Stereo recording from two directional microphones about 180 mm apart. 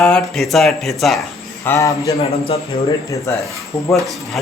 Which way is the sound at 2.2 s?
35° left (ahead or behind).